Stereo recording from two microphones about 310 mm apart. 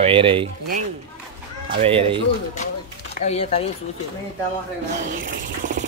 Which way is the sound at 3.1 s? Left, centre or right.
Left.